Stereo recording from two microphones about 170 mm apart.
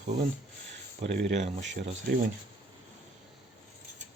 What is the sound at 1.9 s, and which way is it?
Speech, 60° right (ahead or behind).